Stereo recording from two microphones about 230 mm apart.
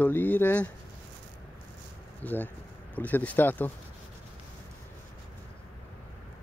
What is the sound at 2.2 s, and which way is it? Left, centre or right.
Speech, centre.